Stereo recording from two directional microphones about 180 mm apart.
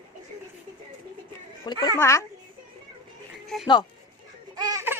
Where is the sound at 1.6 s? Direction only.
25° left (ahead or behind).